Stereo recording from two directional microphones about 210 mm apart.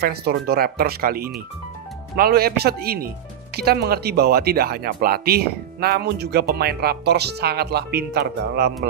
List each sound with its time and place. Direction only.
0.0 s speech: 50° right (ahead or behind)